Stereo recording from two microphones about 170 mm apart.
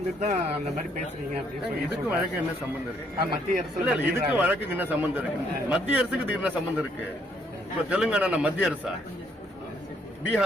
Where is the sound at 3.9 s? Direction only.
10° right (ahead or behind).